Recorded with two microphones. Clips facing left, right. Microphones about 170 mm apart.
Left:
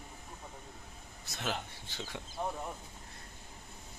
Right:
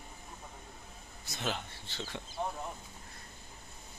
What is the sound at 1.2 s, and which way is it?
Speech, 5° left (ahead or behind).